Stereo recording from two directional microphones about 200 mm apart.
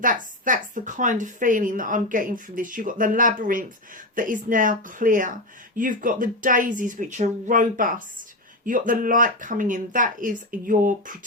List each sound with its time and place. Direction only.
0.0 s speech: 40° right (ahead or behind)